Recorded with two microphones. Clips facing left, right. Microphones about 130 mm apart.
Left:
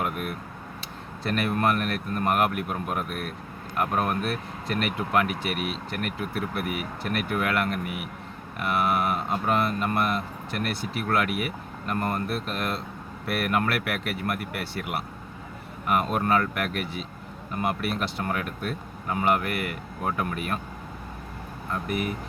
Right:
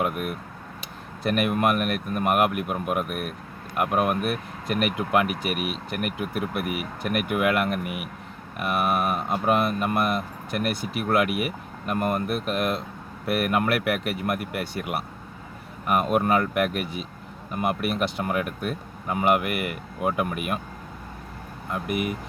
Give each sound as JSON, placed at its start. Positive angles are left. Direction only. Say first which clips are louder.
{"t": 0.8, "sound": "speech", "louder": "right 3 dB", "side_deg": -15}
{"t": 21.7, "sound": "speech", "louder": "right 2 dB", "side_deg": -15}